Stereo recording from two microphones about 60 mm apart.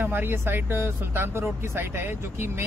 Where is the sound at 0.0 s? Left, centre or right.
Right.